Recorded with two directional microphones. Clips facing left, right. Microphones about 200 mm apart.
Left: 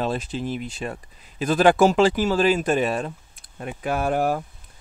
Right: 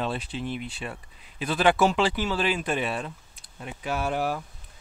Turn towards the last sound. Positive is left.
turn(degrees=45)  # may be behind; listen again after turning